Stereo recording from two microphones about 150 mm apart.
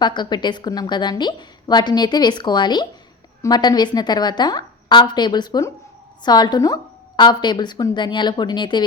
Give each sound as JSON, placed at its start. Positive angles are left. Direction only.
{"t": 0.0, "sound": "a woman's voice", "side_deg": 30}